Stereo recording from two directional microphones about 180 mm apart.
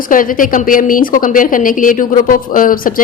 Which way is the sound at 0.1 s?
50° left (ahead or behind).